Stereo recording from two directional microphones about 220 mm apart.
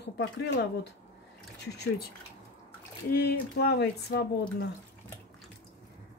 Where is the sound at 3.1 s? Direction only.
45° left (ahead or behind).